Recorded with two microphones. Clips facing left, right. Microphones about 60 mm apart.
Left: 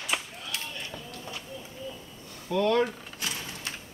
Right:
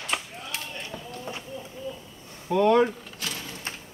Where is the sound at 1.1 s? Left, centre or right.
Right.